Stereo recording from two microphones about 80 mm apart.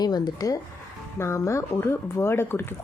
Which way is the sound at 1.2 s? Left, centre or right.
Left.